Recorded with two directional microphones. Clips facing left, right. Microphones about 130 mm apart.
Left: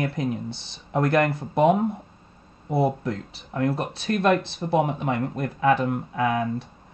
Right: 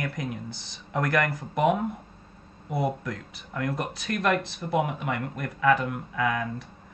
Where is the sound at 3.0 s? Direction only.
30° left (ahead or behind).